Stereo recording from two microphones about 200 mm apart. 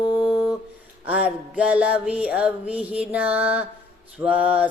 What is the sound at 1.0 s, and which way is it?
Mantra, 5° right (ahead or behind).